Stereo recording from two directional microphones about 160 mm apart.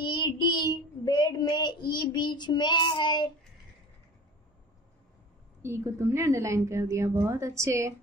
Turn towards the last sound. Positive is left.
turn(degrees=-20)  # may be behind; listen again after turning